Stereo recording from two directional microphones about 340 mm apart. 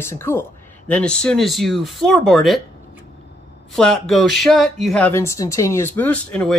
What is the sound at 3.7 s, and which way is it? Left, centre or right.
Speech, centre.